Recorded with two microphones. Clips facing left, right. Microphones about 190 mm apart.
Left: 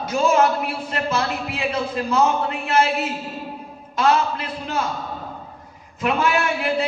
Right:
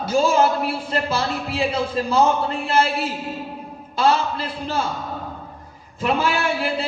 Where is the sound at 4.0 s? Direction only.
30° right (ahead or behind).